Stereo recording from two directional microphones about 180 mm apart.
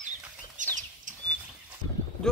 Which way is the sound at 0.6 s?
45° right (ahead or behind).